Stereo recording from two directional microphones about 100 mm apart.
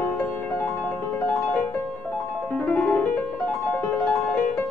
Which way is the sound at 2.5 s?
15° left (ahead or behind).